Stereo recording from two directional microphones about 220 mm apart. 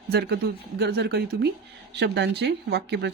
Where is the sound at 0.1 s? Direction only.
45° right (ahead or behind).